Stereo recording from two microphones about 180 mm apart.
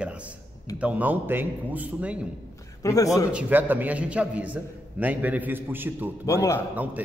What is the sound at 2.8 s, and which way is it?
Speech, 20° left (ahead or behind).